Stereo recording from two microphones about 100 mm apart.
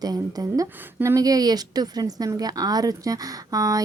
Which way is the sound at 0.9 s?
25° right (ahead or behind).